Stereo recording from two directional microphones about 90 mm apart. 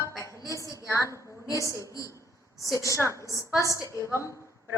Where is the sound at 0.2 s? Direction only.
35° left (ahead or behind).